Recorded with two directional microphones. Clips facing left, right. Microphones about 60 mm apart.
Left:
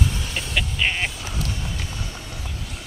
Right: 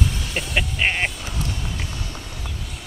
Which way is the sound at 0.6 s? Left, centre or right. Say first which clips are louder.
Right 2 dB; centre.